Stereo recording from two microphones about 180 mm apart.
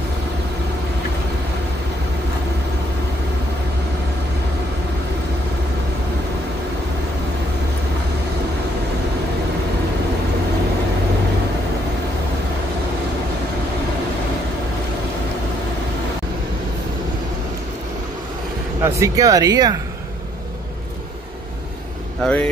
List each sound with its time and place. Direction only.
18.8 s speech: 15° right (ahead or behind)
22.2 s speech: 5° left (ahead or behind)